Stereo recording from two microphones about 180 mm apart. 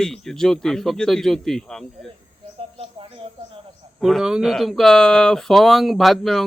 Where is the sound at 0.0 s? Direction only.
Centre (ahead or behind).